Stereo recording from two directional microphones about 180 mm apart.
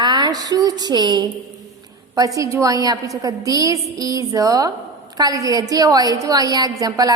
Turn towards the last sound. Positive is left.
turn(degrees=-20)  # may be behind; listen again after turning